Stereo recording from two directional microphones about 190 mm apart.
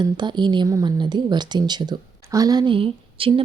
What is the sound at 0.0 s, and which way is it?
A woman's voice, 25° right (ahead or behind).